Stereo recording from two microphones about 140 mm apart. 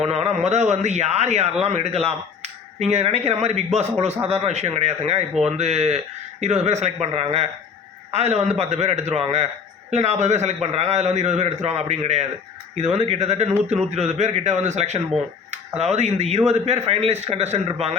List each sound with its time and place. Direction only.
0.1 s a man's voice: 50° right (ahead or behind)